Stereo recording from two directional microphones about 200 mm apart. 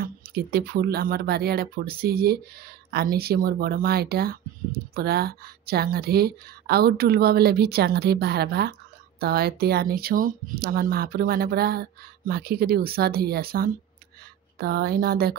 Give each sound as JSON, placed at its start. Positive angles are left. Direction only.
{"t": 0.0, "sound": "speech", "side_deg": -50}